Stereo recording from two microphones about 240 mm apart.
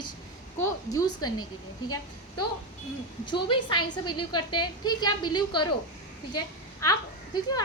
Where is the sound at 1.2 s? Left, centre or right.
Centre.